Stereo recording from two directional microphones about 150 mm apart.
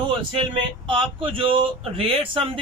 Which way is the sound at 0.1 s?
35° right (ahead or behind).